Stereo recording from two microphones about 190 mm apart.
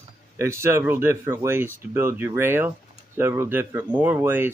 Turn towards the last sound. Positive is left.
turn(degrees=-10)  # may be behind; listen again after turning